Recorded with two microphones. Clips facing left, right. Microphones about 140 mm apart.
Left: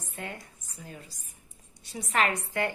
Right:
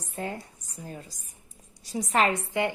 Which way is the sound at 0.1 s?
35° right (ahead or behind).